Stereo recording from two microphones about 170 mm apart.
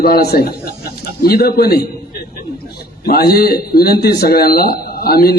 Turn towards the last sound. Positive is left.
turn(degrees=65)  # may be behind; listen again after turning